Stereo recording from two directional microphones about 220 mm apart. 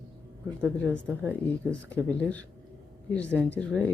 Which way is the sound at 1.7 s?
5° left (ahead or behind).